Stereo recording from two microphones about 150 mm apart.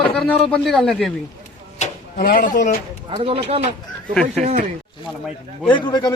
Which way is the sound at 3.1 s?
40° right (ahead or behind).